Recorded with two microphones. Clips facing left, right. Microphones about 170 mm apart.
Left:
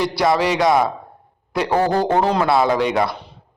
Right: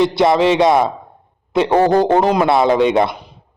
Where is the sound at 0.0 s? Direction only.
25° right (ahead or behind).